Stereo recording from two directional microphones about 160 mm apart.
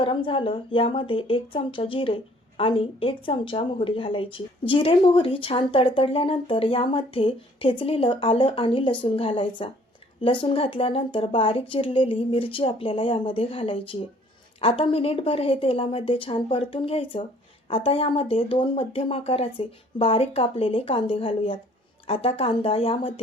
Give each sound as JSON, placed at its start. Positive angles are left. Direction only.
{"t": 0.0, "sound": "speech", "side_deg": 35}